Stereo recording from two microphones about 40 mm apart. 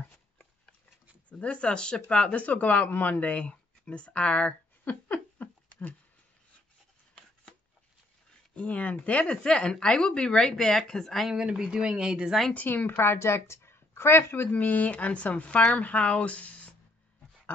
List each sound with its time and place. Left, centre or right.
1.3 s speech: left
2.4 s speech: left
4.8 s a sound: left
8.5 s speech: left
9.4 s speech: centre
11.3 s speech: centre
12.6 s a woman's voice: left
14.5 s speech: left